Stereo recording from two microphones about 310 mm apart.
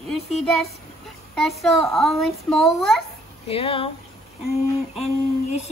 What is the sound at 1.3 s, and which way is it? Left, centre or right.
Speech, centre.